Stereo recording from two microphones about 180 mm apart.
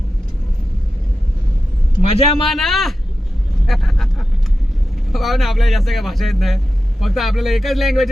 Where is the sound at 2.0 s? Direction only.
35° left (ahead or behind).